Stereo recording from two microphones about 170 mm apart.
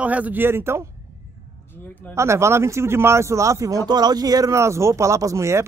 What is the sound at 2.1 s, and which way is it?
Speech, 15° right (ahead or behind).